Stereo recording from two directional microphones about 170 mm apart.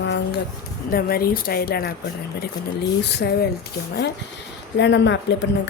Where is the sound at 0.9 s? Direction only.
60° left (ahead or behind).